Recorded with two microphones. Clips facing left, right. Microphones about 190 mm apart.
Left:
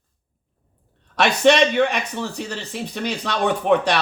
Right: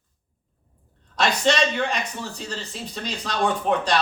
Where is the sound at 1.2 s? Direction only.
65° left (ahead or behind).